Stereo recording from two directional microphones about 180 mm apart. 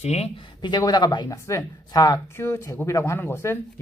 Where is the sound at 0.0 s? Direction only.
35° left (ahead or behind).